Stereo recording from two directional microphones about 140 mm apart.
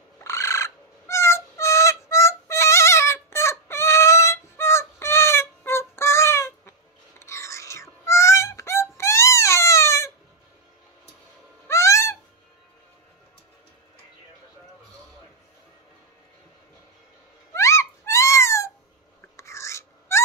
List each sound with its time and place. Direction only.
0.2 s owl: 20° left (ahead or behind)
7.2 s whispering: 20° left (ahead or behind)
11.6 s owl: 20° left (ahead or behind)
17.6 s a sound: 20° left (ahead or behind)